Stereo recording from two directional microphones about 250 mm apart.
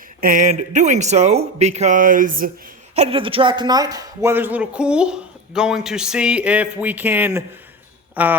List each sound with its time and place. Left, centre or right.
0.2 s a man's voice: right; by 8.4 s centre